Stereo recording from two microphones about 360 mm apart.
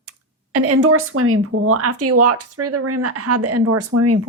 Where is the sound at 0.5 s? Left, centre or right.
Right.